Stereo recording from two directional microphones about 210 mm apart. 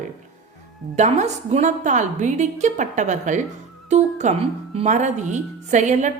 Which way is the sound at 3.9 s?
35° right (ahead or behind).